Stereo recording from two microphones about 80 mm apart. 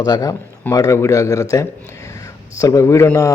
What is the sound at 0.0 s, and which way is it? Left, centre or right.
Speech, left.